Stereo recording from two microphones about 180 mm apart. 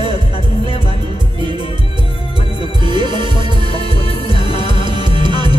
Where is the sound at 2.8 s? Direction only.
30° left (ahead or behind).